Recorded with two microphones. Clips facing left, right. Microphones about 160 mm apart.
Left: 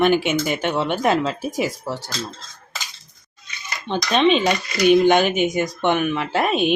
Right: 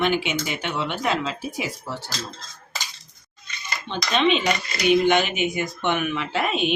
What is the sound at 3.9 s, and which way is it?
Speech, 40° left (ahead or behind).